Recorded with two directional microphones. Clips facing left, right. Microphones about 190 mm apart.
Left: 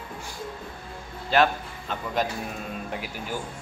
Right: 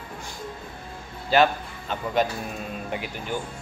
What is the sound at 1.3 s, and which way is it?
A man's voice, centre (ahead or behind).